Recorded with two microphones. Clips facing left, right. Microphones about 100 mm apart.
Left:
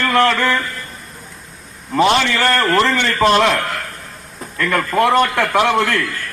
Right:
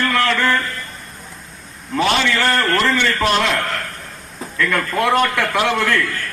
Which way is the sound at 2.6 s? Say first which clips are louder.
Left 2 dB; 15° left (ahead or behind).